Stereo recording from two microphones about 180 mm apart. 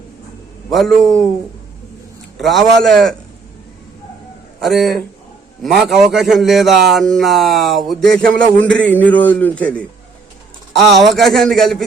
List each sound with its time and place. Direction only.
0.7 s speech: centre (ahead or behind)
2.4 s speech: centre (ahead or behind)
4.6 s a man's voice: centre (ahead or behind)
10.9 s speech: centre (ahead or behind)